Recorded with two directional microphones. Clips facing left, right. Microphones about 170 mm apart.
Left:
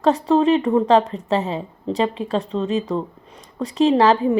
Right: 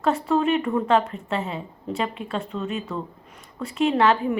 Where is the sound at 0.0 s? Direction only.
35° left (ahead or behind).